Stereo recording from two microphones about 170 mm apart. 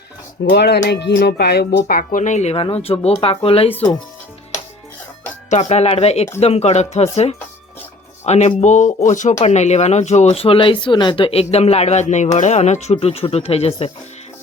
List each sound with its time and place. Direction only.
0.5 s speech: 75° left (ahead or behind); by 3.9 s 35° left (ahead or behind)
5.5 s speech: 40° left (ahead or behind)